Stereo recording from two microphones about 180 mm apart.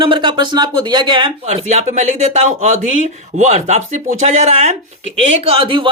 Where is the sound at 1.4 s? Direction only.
40° right (ahead or behind).